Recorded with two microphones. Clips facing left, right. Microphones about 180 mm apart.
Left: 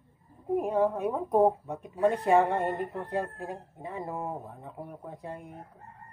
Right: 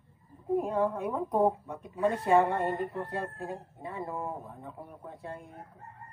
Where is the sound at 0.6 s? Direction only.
20° left (ahead or behind).